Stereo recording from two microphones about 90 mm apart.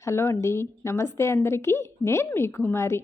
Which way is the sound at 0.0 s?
30° left (ahead or behind).